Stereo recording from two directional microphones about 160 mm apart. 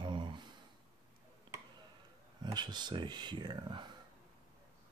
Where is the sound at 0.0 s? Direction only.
30° right (ahead or behind).